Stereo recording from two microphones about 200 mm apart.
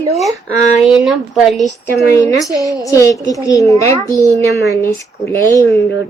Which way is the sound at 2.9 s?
15° left (ahead or behind).